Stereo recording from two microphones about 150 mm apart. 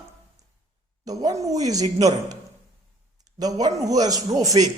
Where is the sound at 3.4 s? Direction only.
25° right (ahead or behind).